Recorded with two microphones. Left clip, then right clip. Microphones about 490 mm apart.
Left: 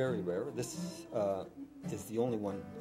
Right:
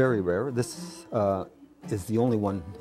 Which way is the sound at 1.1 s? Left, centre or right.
Right.